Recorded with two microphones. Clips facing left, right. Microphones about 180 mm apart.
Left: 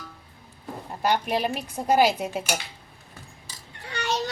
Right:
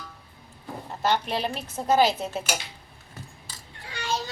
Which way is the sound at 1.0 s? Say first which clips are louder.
Left 2 dB; 15° left (ahead or behind).